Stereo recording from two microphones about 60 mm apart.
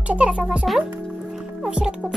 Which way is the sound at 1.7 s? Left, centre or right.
Centre.